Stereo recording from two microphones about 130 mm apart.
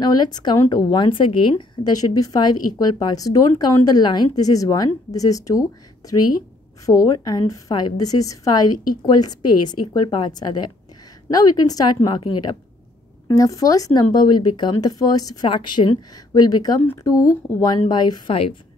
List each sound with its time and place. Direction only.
0.0 s speech: 35° left (ahead or behind)
6.9 s a woman's voice: 25° left (ahead or behind)
13.3 s a woman's voice: 25° left (ahead or behind)
18.3 s a woman's voice: 45° left (ahead or behind)